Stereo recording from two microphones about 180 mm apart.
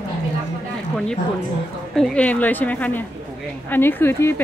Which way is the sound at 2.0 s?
5° left (ahead or behind).